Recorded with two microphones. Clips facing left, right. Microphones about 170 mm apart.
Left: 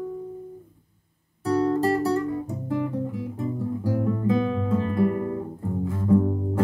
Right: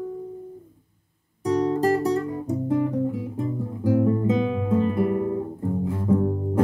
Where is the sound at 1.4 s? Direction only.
20° right (ahead or behind).